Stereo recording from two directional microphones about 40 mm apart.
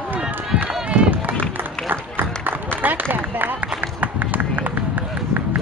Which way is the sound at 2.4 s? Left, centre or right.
Right.